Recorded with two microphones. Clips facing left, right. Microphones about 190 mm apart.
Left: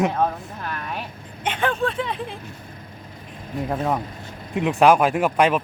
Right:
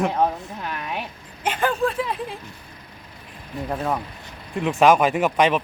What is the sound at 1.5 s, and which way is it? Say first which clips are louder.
Speech: right 1 dB; 5° right (ahead or behind).